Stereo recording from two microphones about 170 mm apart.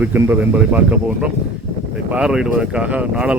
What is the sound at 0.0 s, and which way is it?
Speech, 10° right (ahead or behind).